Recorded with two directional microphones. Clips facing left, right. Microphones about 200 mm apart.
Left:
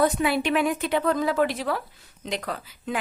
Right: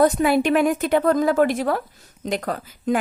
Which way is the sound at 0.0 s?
45° right (ahead or behind).